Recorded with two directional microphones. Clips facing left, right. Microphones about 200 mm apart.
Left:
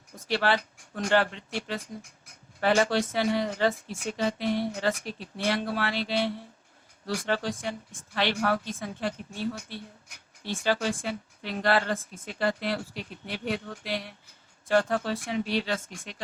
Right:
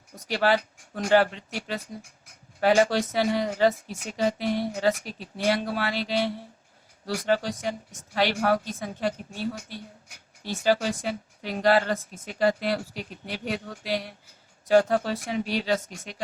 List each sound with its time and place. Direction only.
0.3 s a woman's voice: 40° right (ahead or behind)
1.2 s speech: 10° right (ahead or behind)
2.6 s a woman's voice: 40° right (ahead or behind)
5.9 s speech: 10° right (ahead or behind)
7.3 s a woman's voice: 40° right (ahead or behind)
10.4 s a woman's voice: 40° right (ahead or behind)
12.9 s speech: 10° right (ahead or behind)
13.4 s a woman's voice: 40° right (ahead or behind)